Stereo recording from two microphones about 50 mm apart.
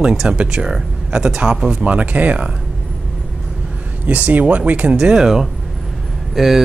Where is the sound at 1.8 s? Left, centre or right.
Right.